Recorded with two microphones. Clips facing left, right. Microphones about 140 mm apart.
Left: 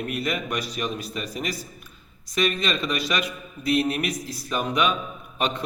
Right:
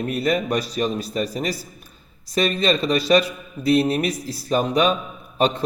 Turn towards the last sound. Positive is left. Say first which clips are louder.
# right 6 dB
turn(degrees=-35)  # may be behind; listen again after turning